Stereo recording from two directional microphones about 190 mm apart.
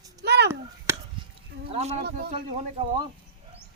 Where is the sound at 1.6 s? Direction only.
35° right (ahead or behind).